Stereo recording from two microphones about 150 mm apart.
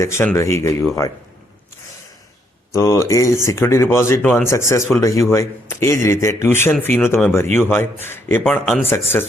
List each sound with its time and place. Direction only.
0.0 s speech: 15° left (ahead or behind)
2.7 s a man's voice: 20° left (ahead or behind)